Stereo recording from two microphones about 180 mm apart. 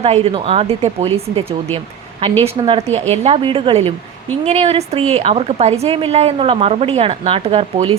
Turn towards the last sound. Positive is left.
turn(degrees=-30)  # may be behind; listen again after turning